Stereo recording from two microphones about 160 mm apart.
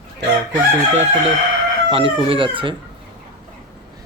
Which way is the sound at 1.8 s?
35° right (ahead or behind).